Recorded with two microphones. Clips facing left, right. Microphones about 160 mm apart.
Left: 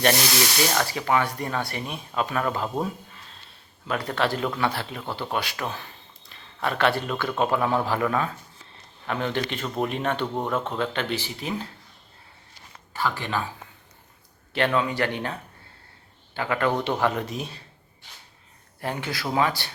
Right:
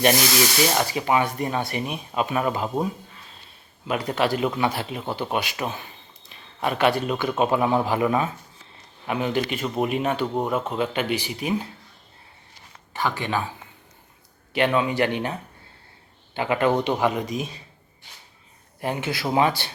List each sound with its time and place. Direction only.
0.7 s a man's voice: 15° right (ahead or behind)
12.9 s speech: 20° right (ahead or behind)
14.5 s speech: 15° right (ahead or behind)
18.8 s speech: 20° right (ahead or behind)